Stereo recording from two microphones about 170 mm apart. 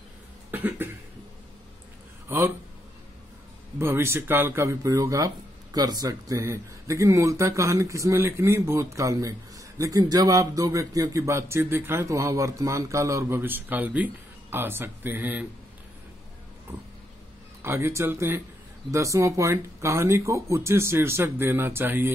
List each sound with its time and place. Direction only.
0.5 s cough: 10° right (ahead or behind)
2.2 s a man's voice: 15° right (ahead or behind)
3.8 s a man's voice: 15° right (ahead or behind)
17.6 s a man's voice: 15° right (ahead or behind)